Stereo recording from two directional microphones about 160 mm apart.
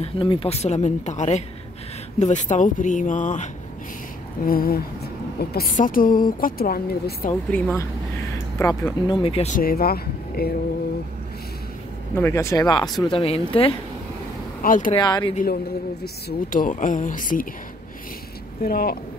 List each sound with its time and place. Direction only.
0.0 s speech: 35° left (ahead or behind); by 3.4 s 50° left (ahead or behind)
4.5 s speech: 70° left (ahead or behind)
5.8 s speech: 60° left (ahead or behind)
7.5 s speech: 15° left (ahead or behind)
9.0 s speech: 35° left (ahead or behind)
9.6 s speech: 70° left (ahead or behind)
12.2 s speech: 15° left (ahead or behind)
13.2 s speech: 35° left (ahead or behind)
14.6 s speech: 60° left (ahead or behind)
15.0 s speech: 25° left (ahead or behind)
15.4 s speech: 75° left (ahead or behind); by 17.5 s 60° left (ahead or behind)
18.6 s speech: 70° left (ahead or behind)